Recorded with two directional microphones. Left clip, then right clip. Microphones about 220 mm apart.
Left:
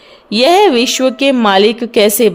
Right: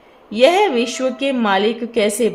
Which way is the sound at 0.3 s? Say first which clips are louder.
Left 5 dB; 45° left (ahead or behind).